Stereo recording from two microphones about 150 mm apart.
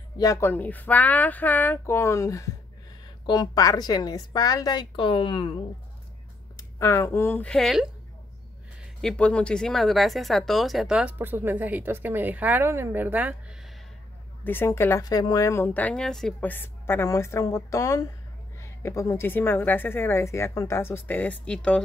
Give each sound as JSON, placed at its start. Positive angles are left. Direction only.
{"t": 0.2, "sound": "a woman's voice", "side_deg": 20}
{"t": 6.5, "sound": "speech", "side_deg": 20}
{"t": 9.0, "sound": "speech", "side_deg": 5}
{"t": 14.4, "sound": "speech", "side_deg": 15}